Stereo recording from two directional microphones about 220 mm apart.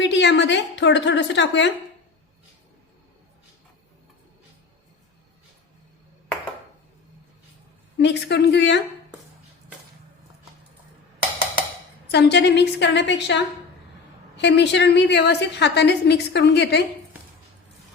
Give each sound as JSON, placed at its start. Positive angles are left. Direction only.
{"t": 0.0, "sound": "a woman's voice", "side_deg": 55}
{"t": 7.9, "sound": "a woman's voice", "side_deg": 50}
{"t": 12.1, "sound": "a woman's voice", "side_deg": 50}